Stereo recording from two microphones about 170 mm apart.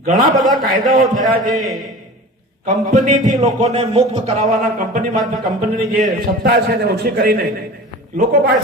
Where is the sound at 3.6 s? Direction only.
40° right (ahead or behind).